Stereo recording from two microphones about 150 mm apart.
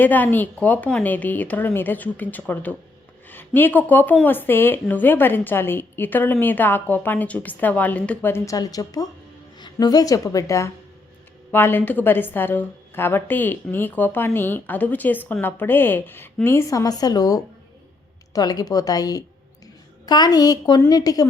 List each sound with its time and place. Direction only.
0.0 s a woman's voice: 10° left (ahead or behind)